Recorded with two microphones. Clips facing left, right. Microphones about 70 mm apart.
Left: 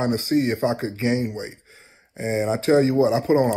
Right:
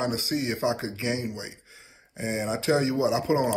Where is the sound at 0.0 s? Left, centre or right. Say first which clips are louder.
Left 7 dB; left.